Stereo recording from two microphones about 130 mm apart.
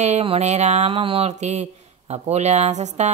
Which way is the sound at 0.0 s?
55° right (ahead or behind).